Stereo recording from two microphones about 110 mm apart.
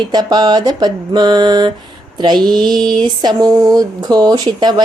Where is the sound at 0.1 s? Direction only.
40° right (ahead or behind).